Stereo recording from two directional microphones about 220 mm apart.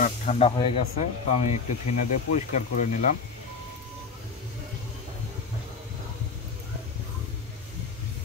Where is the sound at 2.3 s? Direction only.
35° left (ahead or behind).